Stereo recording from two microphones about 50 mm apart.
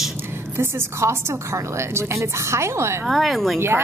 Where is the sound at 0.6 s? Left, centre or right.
Right.